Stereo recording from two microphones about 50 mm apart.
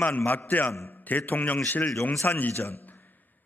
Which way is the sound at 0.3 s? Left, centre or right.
Left.